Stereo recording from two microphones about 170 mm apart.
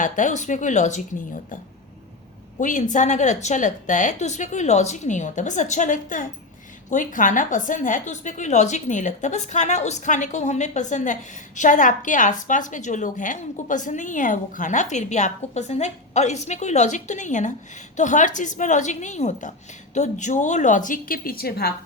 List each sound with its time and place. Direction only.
0.0 s a woman's voice: 45° left (ahead or behind)
2.6 s a woman's voice: 50° left (ahead or behind); by 21.8 s 70° left (ahead or behind)